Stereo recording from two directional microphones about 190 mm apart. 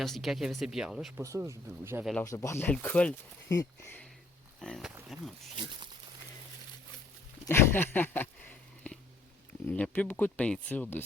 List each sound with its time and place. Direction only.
0.0 s speech: centre (ahead or behind)
1.2 s speech: 15° right (ahead or behind)
2.2 s speech: 15° left (ahead or behind); by 5.3 s centre (ahead or behind)
7.4 s a sound: 10° left (ahead or behind)
9.6 s speech: 10° left (ahead or behind)